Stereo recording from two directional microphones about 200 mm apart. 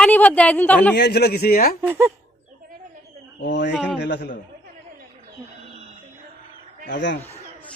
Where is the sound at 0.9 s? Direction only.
55° left (ahead or behind).